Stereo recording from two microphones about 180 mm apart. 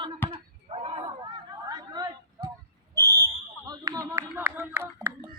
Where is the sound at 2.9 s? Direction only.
15° right (ahead or behind).